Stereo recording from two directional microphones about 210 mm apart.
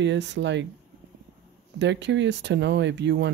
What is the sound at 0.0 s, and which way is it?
Speech, 55° right (ahead or behind).